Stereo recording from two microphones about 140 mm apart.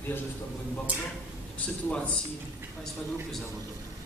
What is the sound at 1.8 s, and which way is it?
Speech, 10° left (ahead or behind).